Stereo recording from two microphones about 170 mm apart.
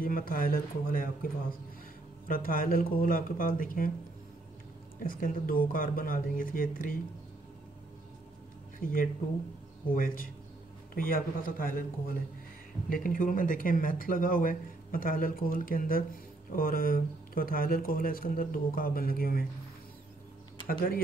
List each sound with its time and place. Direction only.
0.0 s speech: 55° left (ahead or behind)
5.0 s speech: 55° left (ahead or behind)
8.7 s speech: 55° left (ahead or behind)